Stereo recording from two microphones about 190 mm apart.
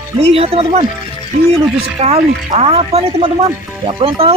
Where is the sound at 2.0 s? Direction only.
35° right (ahead or behind).